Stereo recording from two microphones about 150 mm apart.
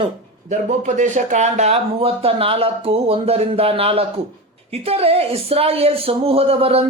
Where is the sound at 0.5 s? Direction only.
50° right (ahead or behind).